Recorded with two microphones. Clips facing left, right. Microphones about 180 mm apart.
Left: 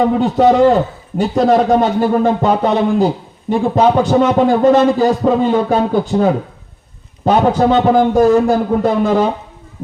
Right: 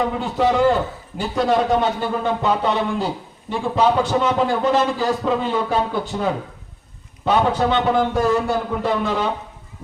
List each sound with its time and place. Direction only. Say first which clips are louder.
0.0 s a man's voice: left 8 dB; 40° left (ahead or behind)